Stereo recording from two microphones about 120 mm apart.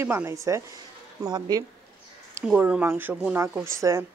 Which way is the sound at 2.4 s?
10° right (ahead or behind).